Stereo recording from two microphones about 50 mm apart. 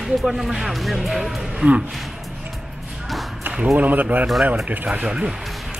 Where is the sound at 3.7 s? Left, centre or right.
Right.